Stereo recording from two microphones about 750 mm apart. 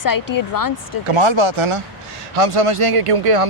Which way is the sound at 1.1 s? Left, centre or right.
Right.